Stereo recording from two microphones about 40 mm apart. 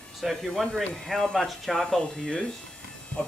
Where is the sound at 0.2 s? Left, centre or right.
Centre.